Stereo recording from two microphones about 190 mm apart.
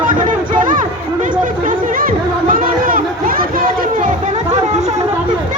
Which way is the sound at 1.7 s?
45° right (ahead or behind).